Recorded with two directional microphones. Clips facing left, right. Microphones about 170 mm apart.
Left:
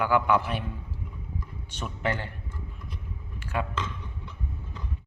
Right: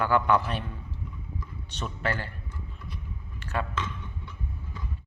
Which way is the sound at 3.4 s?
10° left (ahead or behind).